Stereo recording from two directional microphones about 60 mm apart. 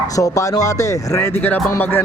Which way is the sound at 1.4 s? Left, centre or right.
Left.